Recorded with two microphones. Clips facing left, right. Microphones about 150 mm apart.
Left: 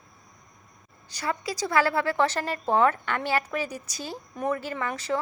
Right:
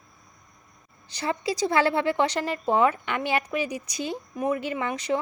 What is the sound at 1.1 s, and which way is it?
A woman's voice, 25° right (ahead or behind).